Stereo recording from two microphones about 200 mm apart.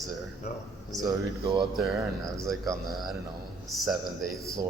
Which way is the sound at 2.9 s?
Centre (ahead or behind).